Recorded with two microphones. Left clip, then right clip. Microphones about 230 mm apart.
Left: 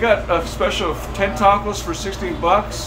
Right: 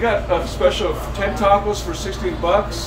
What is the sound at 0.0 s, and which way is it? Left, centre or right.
A man's voice, centre.